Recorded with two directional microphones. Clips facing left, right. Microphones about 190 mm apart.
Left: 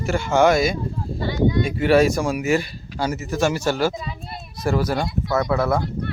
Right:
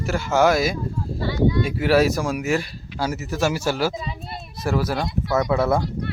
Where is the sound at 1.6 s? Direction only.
5° right (ahead or behind).